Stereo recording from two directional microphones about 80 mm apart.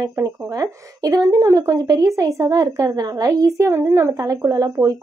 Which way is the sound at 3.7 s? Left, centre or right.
Right.